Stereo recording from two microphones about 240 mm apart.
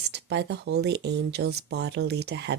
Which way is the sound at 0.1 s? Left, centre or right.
Right.